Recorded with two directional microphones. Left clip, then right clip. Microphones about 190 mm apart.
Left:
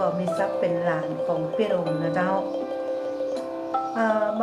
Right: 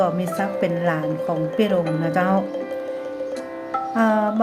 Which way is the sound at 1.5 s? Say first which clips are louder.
Right 3 dB; 55° right (ahead or behind).